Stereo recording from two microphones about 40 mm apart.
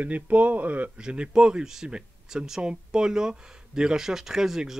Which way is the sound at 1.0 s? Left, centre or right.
Right.